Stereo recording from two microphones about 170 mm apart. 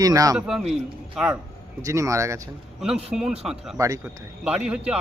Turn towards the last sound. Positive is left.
turn(degrees=-5)  # may be behind; listen again after turning